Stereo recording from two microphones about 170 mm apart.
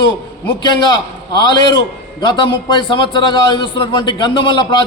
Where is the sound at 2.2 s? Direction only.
25° left (ahead or behind).